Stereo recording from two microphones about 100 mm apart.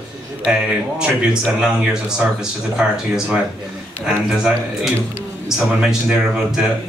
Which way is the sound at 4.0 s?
10° right (ahead or behind).